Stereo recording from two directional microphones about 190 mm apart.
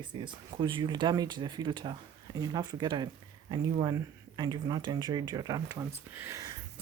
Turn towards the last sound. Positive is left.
turn(degrees=-15)  # may be behind; listen again after turning